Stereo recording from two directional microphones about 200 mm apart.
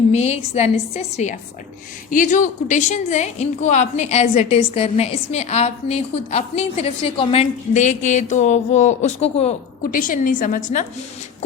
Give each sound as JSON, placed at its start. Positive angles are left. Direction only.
{"t": 0.1, "sound": "a woman's voice", "side_deg": 35}